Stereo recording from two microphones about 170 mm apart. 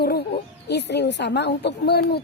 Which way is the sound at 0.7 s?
80° left.